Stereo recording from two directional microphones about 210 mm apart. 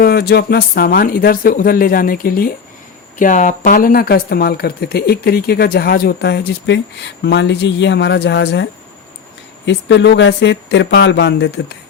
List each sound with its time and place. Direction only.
0.0 s speech: 50° left (ahead or behind)
9.6 s speech: 55° left (ahead or behind)